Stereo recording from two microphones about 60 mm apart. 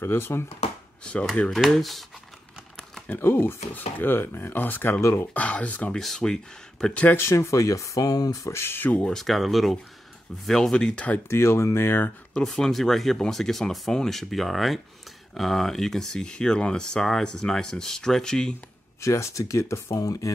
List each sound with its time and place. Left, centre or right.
0.0 s speech: left
1.5 s speech: centre
3.1 s speech: left
5.9 s speech: centre
7.2 s speech: left
8.5 s speech: left
9.0 s speech: centre
11.2 s speech: left
12.4 s speech: centre
18.9 s speech: left